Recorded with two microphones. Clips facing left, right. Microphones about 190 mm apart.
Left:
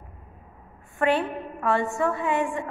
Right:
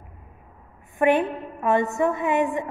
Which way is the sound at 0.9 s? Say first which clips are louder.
Right 4 dB; 20° right (ahead or behind).